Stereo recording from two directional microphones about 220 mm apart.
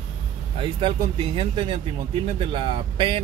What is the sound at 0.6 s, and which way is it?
Speech, 25° right (ahead or behind).